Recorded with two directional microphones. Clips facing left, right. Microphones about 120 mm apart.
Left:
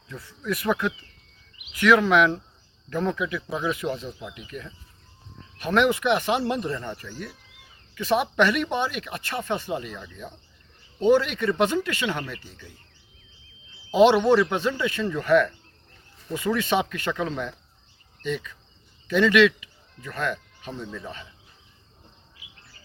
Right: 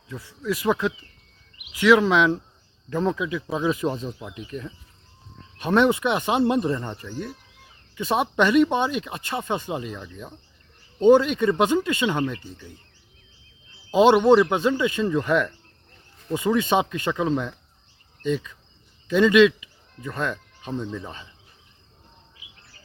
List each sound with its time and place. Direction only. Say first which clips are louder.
0.1 s speech: right 2 dB; 15° right (ahead or behind)
14.2 s speech: right 3 dB; 20° right (ahead or behind)
18.2 s insect: right 4 dB; 20° right (ahead or behind)
19.0 s speech: right 3 dB; 25° right (ahead or behind)